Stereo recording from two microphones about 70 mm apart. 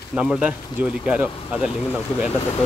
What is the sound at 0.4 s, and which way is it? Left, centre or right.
Speech, right.